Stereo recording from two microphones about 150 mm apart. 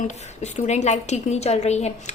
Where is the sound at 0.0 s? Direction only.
50° left (ahead or behind).